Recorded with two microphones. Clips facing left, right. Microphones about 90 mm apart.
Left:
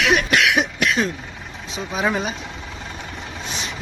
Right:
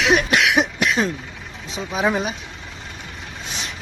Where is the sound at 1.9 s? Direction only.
10° right (ahead or behind).